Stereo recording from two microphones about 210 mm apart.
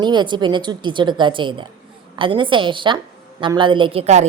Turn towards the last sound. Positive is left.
turn(degrees=-30)  # may be behind; listen again after turning